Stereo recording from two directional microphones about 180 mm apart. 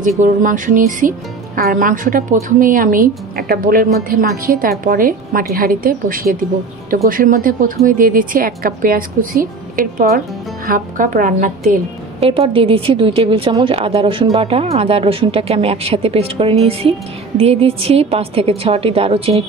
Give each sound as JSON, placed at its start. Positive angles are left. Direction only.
{"t": 0.2, "sound": "a woman's voice", "side_deg": -45}
{"t": 12.2, "sound": "speech", "side_deg": -30}